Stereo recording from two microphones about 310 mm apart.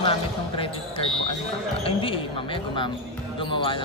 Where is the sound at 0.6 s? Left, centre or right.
Centre.